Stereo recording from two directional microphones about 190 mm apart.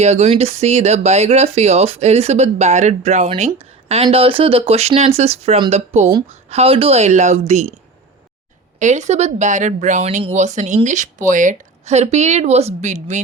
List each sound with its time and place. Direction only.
0.0 s speech: 35° right (ahead or behind)
8.8 s speech: 40° right (ahead or behind)